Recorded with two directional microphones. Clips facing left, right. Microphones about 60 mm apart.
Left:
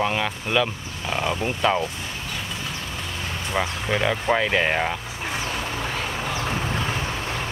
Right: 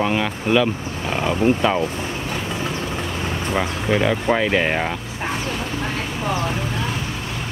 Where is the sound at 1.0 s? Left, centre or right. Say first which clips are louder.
Right 6 dB; centre.